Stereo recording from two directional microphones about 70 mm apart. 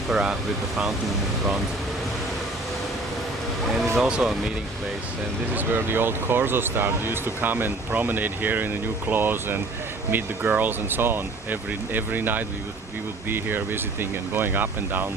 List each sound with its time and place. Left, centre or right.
0.1 s speech: centre
4.0 s speech: centre
5.5 s speech: right